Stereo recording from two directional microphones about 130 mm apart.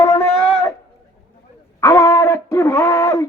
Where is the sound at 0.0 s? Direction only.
20° left (ahead or behind).